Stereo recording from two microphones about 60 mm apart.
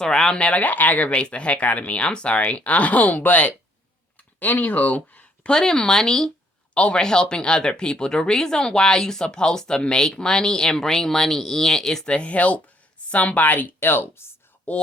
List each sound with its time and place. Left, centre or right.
0.0 s speech: centre; by 5.5 s left
5.5 s speech: centre
12.1 s speech: left
14.7 s speech: left